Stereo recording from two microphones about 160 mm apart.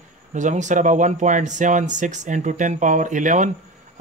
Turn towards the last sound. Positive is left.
turn(degrees=-50)  # may be behind; listen again after turning